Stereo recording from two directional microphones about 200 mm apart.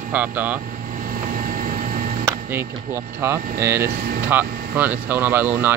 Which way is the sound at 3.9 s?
50° right (ahead or behind).